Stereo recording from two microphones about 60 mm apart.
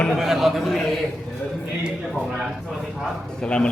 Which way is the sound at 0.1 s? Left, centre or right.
Centre.